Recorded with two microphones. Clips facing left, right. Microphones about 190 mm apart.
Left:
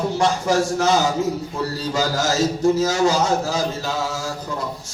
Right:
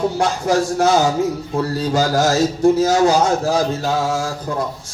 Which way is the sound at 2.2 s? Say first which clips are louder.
Right 4 dB; 60° right (ahead or behind).